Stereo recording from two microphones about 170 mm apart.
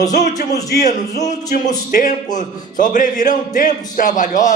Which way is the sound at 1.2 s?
45° left (ahead or behind).